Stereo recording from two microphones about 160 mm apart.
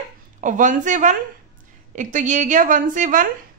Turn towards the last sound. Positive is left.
turn(degrees=-55)  # may be behind; listen again after turning